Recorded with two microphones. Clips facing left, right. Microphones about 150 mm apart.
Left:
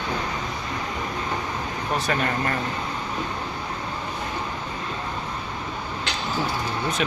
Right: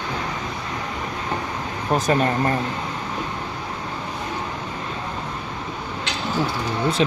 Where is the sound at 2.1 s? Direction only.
30° right (ahead or behind).